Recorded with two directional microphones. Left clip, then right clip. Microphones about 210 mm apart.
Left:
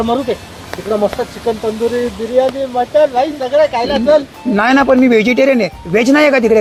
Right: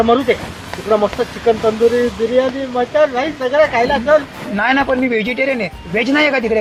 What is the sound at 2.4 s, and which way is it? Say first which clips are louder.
Speech: left 6 dB; 20° left (ahead or behind).